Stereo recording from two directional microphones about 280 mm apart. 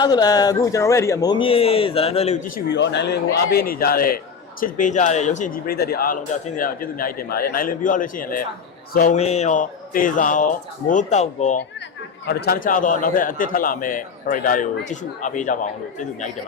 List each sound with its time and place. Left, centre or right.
0.0 s a man's voice: centre
2.6 s a man's voice: left